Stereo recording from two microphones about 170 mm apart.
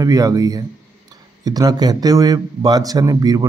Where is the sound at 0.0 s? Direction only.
20° right (ahead or behind).